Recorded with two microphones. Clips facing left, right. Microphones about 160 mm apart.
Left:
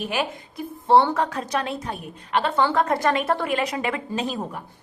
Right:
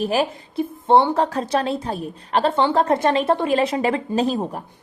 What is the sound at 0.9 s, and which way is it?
Speech, 20° right (ahead or behind).